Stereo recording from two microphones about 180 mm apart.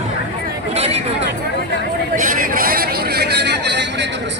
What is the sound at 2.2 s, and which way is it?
Vehicle, 50° right (ahead or behind).